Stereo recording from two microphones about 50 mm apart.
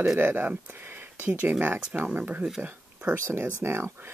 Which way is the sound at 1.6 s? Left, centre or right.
Right.